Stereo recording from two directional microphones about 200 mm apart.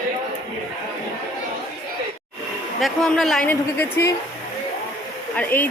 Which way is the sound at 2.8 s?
Centre (ahead or behind).